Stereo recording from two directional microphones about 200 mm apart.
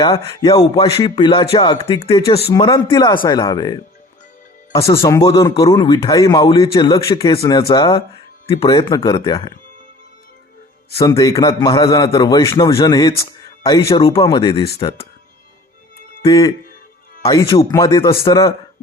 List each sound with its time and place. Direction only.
0.3 s a man's voice: 25° left (ahead or behind)
4.9 s a man's voice: 15° left (ahead or behind)
10.9 s a man's voice: 15° left (ahead or behind)
16.2 s a man's voice: 15° left (ahead or behind)